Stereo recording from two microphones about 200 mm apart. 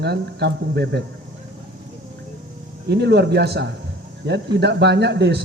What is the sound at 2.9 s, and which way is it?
Speech, 55° right (ahead or behind).